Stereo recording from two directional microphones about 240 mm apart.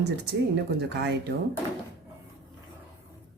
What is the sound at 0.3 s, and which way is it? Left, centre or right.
Speech, right.